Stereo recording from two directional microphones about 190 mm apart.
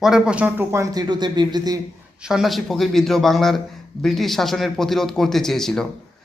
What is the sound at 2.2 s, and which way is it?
A man's voice, centre (ahead or behind).